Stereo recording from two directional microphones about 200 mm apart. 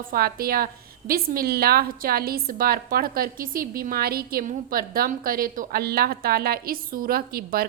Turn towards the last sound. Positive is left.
turn(degrees=-50)  # may be behind; listen again after turning